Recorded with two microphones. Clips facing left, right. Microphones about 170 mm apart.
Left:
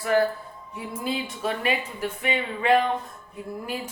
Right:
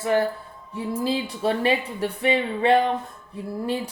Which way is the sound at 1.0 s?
30° right (ahead or behind).